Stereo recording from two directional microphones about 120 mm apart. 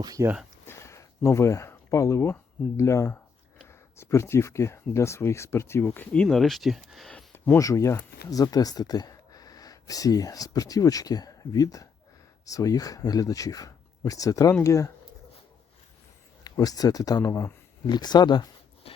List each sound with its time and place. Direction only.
0.0 s speech: 30° right (ahead or behind)
0.6 s speech: 20° left (ahead or behind)
6.2 s speech: centre (ahead or behind)
7.3 s speech: 20° left (ahead or behind)
16.4 s speech: 30° left (ahead or behind)